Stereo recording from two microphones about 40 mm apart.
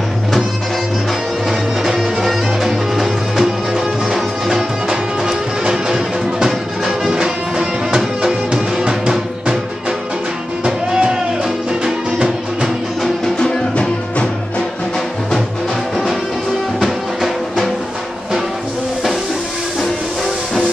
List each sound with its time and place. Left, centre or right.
2.2 s music: centre
10.6 s music: right
11.4 s music: centre
16.8 s music: centre